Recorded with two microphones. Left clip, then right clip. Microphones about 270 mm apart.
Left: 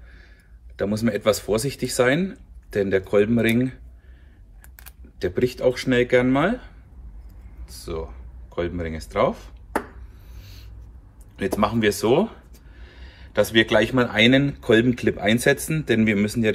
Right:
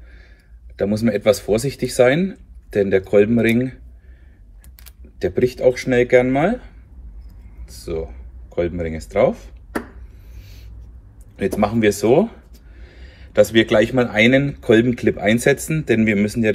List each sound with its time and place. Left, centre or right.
0.9 s speech: centre
5.3 s speech: centre
10.3 s a sound: centre
11.3 s speech: centre